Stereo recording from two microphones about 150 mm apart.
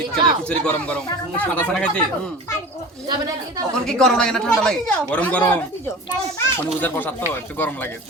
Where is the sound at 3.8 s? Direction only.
5° left (ahead or behind).